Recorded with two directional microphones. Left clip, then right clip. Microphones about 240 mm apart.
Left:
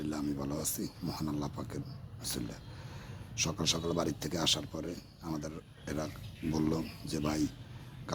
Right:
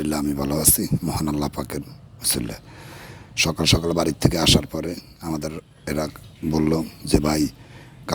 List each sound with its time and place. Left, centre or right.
0.0 s speech: right